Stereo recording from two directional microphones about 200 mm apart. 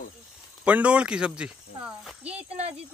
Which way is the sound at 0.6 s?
5° right (ahead or behind).